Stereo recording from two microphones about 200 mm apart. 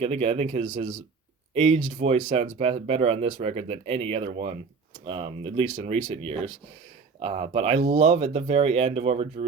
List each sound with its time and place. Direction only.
0.0 s speech: 30° right (ahead or behind)